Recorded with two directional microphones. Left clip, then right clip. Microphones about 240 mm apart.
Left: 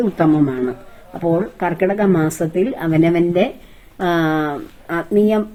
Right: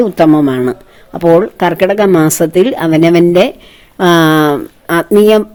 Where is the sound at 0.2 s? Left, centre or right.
Right.